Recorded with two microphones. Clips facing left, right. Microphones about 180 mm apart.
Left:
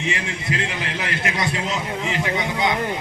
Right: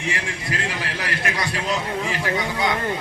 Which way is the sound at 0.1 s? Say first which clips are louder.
Right 1 dB; 20° left (ahead or behind).